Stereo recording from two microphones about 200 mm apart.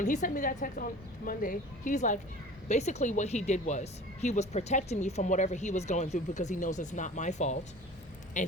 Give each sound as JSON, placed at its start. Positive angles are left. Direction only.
{"t": 0.0, "sound": "a woman's voice", "side_deg": 40}